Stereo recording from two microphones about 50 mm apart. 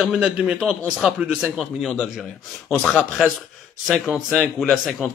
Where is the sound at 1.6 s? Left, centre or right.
Centre.